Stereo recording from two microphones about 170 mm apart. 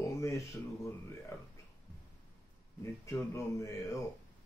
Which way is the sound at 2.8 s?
15° left (ahead or behind).